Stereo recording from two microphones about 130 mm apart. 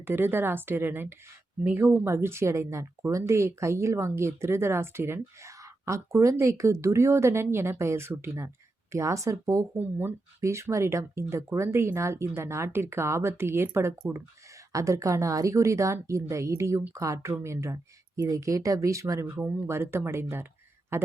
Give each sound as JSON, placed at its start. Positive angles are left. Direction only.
{"t": 0.0, "sound": "a woman's voice", "side_deg": -15}
{"t": 9.7, "sound": "speech", "side_deg": -15}